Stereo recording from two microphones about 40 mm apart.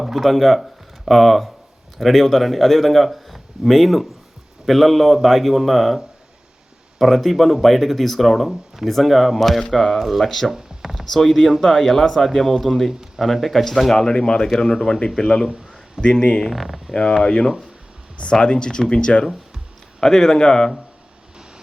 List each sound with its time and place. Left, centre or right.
0.0 s speech: centre
10.5 s a sound: centre
11.1 s speech: centre
13.9 s speech: centre
16.5 s speech: centre
16.9 s speech: left